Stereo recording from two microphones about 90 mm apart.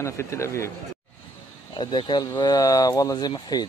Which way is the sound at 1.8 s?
55° left (ahead or behind).